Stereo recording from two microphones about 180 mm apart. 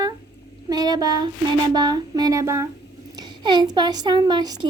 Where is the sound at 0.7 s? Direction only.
20° right (ahead or behind).